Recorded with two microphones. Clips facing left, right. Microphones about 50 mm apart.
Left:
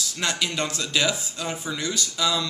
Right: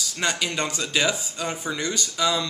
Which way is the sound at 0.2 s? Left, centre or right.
Centre.